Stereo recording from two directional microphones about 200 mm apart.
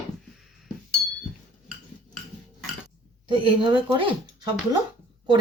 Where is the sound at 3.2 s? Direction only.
25° right (ahead or behind).